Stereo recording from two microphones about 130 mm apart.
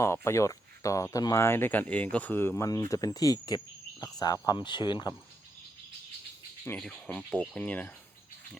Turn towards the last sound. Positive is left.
turn(degrees=10)  # may be behind; listen again after turning